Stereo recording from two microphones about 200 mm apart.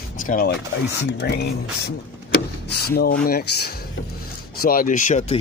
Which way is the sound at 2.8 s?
50° left (ahead or behind).